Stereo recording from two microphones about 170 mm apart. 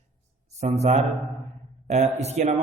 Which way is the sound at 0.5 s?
40° right (ahead or behind).